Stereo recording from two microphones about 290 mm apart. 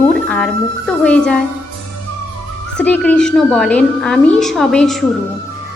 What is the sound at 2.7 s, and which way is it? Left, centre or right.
A woman's voice, centre.